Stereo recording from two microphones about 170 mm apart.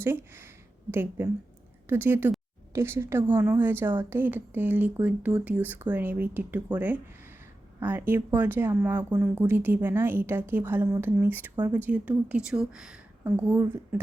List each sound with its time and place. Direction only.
0.0 s speech: 15° right (ahead or behind)